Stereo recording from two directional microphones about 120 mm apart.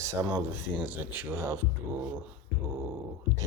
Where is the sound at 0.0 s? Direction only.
20° right (ahead or behind).